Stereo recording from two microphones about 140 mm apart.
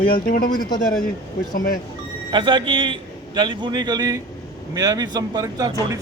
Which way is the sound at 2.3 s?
35° right (ahead or behind).